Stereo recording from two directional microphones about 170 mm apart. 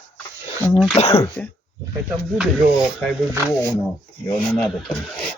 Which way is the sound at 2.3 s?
5° right (ahead or behind).